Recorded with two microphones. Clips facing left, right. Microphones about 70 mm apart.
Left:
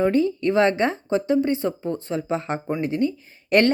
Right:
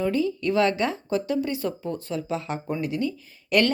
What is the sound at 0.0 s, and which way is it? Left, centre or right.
A woman's voice, left.